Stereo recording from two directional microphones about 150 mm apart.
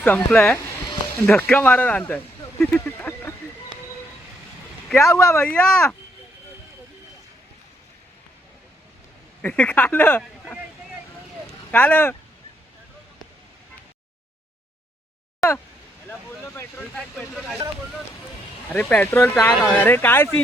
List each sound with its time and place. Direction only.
0.0 s speech: 10° left (ahead or behind)
4.9 s speech: 20° left (ahead or behind)
5.4 s speech: 5° left (ahead or behind)
9.4 s speech: 10° left (ahead or behind)
11.7 s speech: 10° left (ahead or behind)
15.4 s speech: 10° left (ahead or behind)
17.2 s speech: 5° right (ahead or behind)
18.7 s speech: 10° left (ahead or behind)